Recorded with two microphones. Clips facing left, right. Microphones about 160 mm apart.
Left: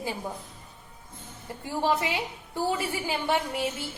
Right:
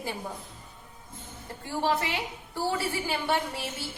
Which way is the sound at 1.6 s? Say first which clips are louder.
Left 1 dB; 15° left (ahead or behind).